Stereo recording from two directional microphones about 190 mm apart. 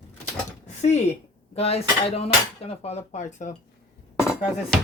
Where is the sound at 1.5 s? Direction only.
30° left (ahead or behind).